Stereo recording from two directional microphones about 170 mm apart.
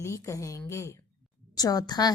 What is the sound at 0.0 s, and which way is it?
A woman's voice, 15° left (ahead or behind).